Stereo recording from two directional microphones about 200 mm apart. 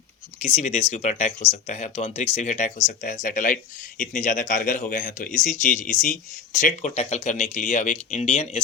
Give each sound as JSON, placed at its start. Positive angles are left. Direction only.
{"t": 0.4, "sound": "speech", "side_deg": 35}